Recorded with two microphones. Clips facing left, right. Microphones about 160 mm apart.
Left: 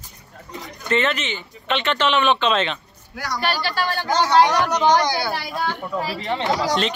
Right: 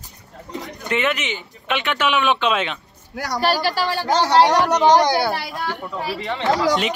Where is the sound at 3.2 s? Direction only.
40° right (ahead or behind).